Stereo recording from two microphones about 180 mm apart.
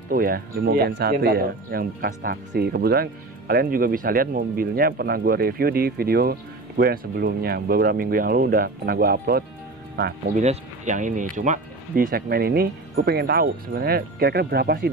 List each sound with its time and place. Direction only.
0.1 s speech: 55° right (ahead or behind)
10.3 s speech: 40° right (ahead or behind); by 14.9 s 60° right (ahead or behind)